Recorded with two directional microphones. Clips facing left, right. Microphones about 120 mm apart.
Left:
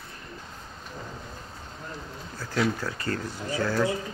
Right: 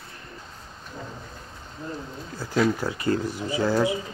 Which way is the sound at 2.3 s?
15° right (ahead or behind).